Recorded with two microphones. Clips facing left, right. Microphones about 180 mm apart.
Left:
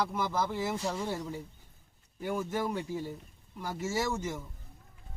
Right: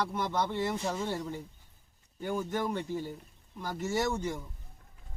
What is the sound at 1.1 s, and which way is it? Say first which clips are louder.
Speech: right 1 dB; 5° left (ahead or behind).